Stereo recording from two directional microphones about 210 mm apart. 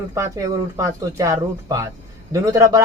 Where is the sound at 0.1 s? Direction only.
15° right (ahead or behind).